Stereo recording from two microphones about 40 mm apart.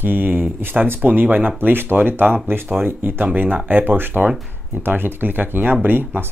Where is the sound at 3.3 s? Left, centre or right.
Right.